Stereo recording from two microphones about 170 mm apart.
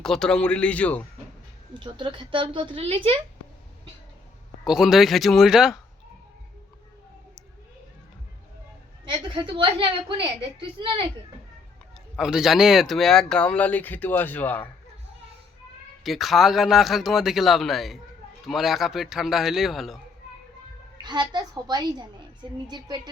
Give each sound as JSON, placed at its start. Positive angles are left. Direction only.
{"t": 0.0, "sound": "speech", "side_deg": 5}
{"t": 1.8, "sound": "speech", "side_deg": -25}
{"t": 4.6, "sound": "speech", "side_deg": 0}
{"t": 9.0, "sound": "speech", "side_deg": -30}
{"t": 12.1, "sound": "speech", "side_deg": -5}
{"t": 16.0, "sound": "speech", "side_deg": 0}
{"t": 21.0, "sound": "speech", "side_deg": -25}